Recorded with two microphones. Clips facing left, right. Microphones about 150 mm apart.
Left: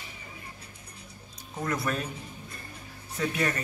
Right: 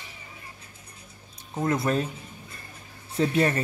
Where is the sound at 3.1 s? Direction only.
30° right (ahead or behind).